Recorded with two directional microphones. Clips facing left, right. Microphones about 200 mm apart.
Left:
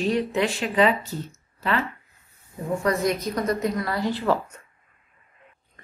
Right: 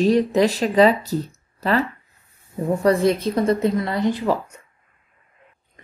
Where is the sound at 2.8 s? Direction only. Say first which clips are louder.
Right 6 dB; 30° right (ahead or behind); by 4.6 s 15° right (ahead or behind).